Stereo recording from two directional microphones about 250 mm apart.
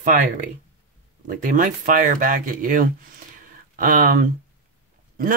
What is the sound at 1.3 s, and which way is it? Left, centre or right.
Speech, right.